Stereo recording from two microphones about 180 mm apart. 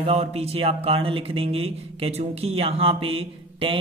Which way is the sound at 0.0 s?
35° right (ahead or behind).